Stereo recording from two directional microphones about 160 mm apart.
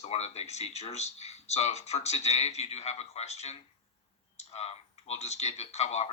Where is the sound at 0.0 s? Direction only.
40° left (ahead or behind).